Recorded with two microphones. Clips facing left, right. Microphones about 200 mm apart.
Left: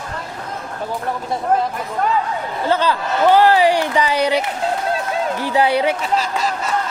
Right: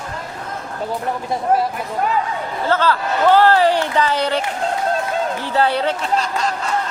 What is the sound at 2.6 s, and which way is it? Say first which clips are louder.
Speech: even; 15° left (ahead or behind).